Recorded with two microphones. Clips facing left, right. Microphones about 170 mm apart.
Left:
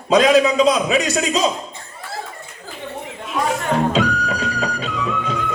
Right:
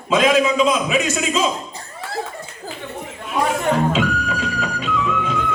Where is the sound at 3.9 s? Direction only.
40° left (ahead or behind).